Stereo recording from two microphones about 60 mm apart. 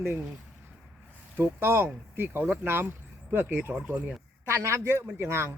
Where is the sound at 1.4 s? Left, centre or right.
Right.